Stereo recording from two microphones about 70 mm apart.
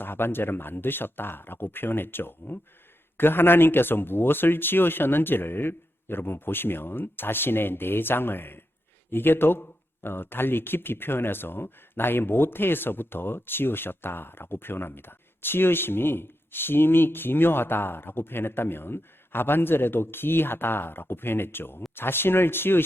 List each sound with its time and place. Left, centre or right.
0.0 s speech: left